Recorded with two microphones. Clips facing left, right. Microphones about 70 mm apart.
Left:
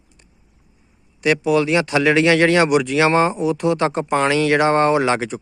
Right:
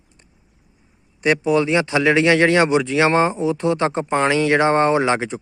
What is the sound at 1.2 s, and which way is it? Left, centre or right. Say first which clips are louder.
Speech: even; right.